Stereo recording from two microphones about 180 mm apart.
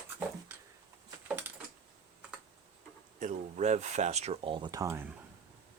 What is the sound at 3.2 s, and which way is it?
Speech, 45° right (ahead or behind).